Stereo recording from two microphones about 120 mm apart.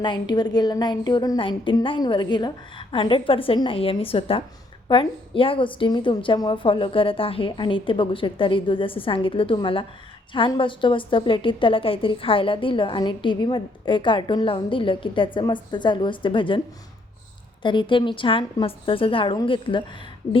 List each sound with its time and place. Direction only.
0.0 s a woman's voice: 40° left (ahead or behind)
1.4 s a woman's voice: 45° left (ahead or behind)
17.6 s a woman's voice: 40° left (ahead or behind)